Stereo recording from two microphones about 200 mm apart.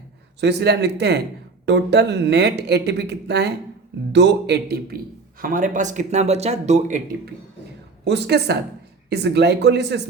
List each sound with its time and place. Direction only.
0.3 s speech: 55° right (ahead or behind)
5.4 s speech: 40° right (ahead or behind)
8.0 s speech: 55° right (ahead or behind)